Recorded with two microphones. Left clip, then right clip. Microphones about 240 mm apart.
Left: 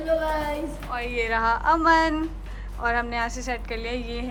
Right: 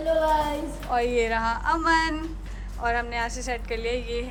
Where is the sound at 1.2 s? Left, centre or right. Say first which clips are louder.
Left 3 dB; centre.